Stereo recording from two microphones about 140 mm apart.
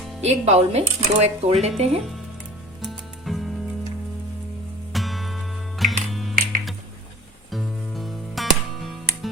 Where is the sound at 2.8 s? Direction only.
Centre (ahead or behind).